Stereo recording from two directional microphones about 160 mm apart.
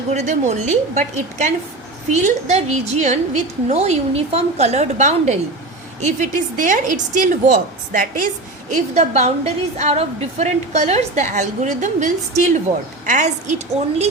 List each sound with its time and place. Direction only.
0.1 s a woman's voice: 45° right (ahead or behind)
8.7 s a woman's voice: 45° right (ahead or behind)